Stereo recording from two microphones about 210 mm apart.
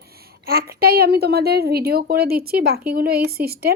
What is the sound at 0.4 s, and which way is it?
A woman's voice, 45° right (ahead or behind).